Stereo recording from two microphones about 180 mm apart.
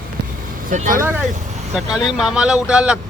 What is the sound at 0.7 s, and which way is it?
Speech, 50° right (ahead or behind).